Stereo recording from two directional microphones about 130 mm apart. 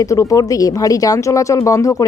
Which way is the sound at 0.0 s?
25° left (ahead or behind).